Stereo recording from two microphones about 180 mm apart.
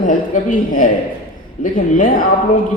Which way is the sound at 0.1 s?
45° left (ahead or behind).